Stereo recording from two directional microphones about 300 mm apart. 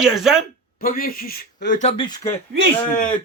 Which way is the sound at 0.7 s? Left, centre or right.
Left.